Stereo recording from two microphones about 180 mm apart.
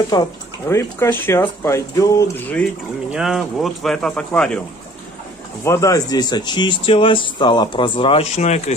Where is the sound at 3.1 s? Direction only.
Centre (ahead or behind).